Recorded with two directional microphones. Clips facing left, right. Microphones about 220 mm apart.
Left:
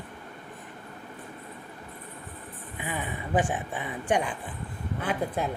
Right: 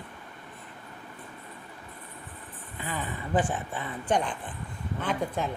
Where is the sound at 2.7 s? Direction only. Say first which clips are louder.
Left 1 dB; 15° left (ahead or behind).